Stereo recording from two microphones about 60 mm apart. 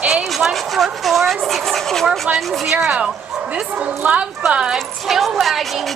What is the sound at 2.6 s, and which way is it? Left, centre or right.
Speech, centre.